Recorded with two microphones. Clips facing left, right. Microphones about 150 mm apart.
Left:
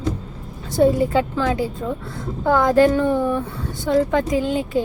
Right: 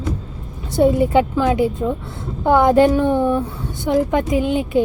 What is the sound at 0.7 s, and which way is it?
Speech, 20° right (ahead or behind).